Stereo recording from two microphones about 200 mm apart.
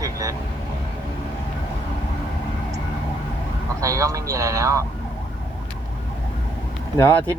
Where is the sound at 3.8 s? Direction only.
15° right (ahead or behind).